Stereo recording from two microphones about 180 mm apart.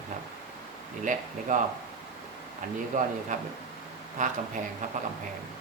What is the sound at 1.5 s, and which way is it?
Speech, 45° right (ahead or behind).